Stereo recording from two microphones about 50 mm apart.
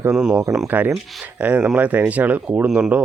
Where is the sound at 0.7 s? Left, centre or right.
Right.